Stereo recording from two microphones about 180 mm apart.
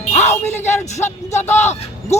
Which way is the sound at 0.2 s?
40° left (ahead or behind).